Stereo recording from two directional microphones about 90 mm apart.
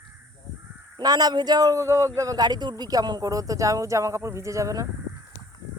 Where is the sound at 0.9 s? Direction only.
50° right (ahead or behind).